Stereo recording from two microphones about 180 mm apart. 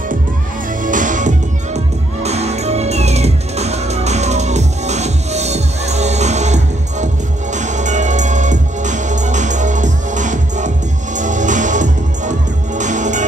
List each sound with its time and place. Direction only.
0.8 s music: 45° right (ahead or behind)